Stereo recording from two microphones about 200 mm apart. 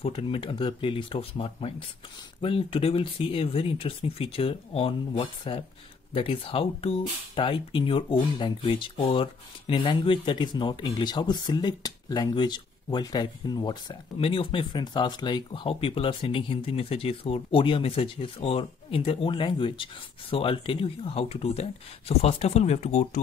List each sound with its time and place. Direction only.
0.0 s speech: 25° left (ahead or behind)